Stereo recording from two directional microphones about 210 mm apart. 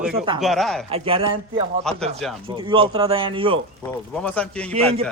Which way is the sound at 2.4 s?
25° right (ahead or behind).